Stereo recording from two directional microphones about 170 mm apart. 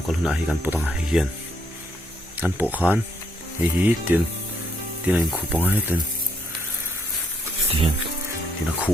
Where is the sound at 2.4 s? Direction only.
10° right (ahead or behind).